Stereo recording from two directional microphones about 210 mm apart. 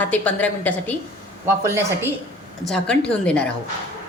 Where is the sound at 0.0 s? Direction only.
5° left (ahead or behind).